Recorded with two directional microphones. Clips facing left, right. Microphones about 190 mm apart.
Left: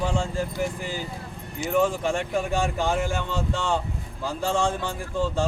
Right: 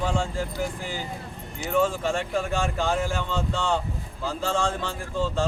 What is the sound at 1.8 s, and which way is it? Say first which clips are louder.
Speech: left 1 dB; 15° left (ahead or behind).